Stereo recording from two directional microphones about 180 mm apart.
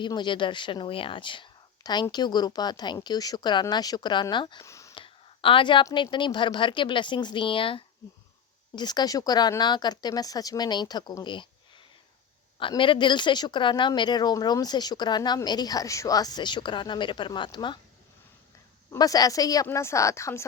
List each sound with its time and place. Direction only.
0.0 s speech: 25° left (ahead or behind)
5.0 s speech: 30° left (ahead or behind)
12.5 s speech: 30° left (ahead or behind)
18.9 s speech: 20° left (ahead or behind)